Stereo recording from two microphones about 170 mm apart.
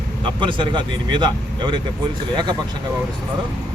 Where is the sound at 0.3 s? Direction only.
30° right (ahead or behind).